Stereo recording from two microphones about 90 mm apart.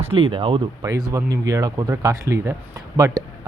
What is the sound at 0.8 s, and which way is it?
Speech, 40° right (ahead or behind).